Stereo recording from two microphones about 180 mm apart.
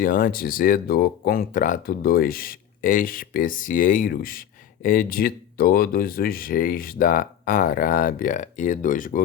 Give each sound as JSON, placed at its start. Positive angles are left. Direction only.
{"t": 0.0, "sound": "speech", "side_deg": 50}